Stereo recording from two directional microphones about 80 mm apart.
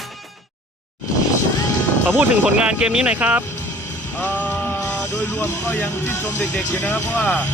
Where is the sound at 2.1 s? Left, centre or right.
Centre.